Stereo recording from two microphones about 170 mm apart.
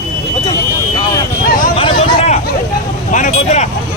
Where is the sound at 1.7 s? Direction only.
35° left (ahead or behind).